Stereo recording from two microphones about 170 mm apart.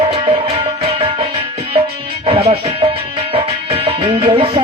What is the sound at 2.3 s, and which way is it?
Music, 40° right (ahead or behind).